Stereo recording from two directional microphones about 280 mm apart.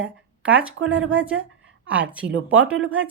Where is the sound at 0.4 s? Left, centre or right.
Centre.